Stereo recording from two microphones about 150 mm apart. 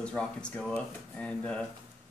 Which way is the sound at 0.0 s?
5° left (ahead or behind).